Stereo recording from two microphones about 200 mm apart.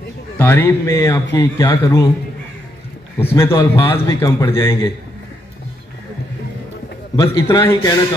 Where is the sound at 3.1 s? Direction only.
10° left (ahead or behind).